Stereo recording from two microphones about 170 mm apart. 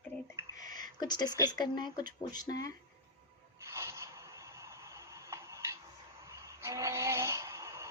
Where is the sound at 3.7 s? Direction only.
15° right (ahead or behind).